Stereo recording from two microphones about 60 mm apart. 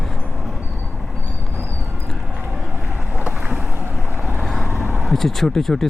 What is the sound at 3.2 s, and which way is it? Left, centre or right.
Vehicle, right.